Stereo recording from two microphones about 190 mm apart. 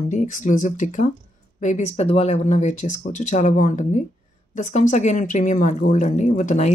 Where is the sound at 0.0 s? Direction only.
40° left (ahead or behind).